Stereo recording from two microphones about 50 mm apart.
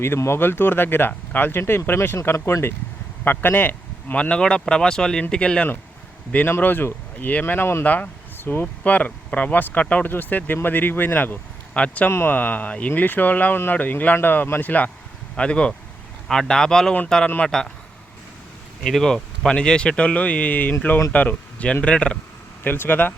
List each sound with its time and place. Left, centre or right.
0.3 s speech: left
3.2 s speech: left
4.1 s speech: centre
6.6 s speech: left
7.9 s a sound: left
8.6 s speech: left
11.7 s speech: left
12.3 s speech: left
15.4 s speech: left
18.8 s speech: centre
22.6 s speech: left